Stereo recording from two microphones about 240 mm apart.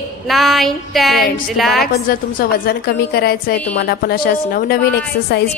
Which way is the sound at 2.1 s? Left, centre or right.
Left.